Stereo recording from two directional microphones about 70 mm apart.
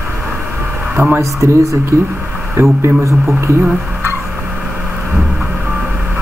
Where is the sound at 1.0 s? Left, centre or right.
Right.